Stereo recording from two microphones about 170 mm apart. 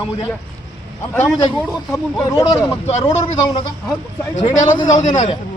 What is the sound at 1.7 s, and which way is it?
Speech, centre (ahead or behind).